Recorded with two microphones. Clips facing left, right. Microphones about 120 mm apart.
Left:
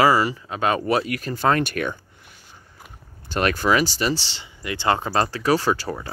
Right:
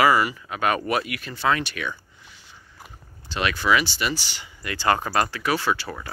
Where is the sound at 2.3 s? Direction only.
50° left (ahead or behind).